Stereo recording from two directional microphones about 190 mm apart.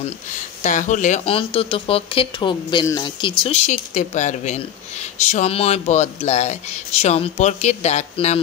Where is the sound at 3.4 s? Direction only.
35° left (ahead or behind).